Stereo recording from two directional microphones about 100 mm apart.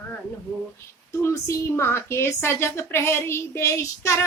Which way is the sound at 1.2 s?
30° left (ahead or behind).